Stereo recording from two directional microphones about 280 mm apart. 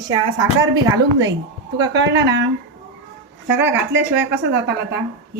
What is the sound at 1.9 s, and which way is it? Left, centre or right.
Speech, right.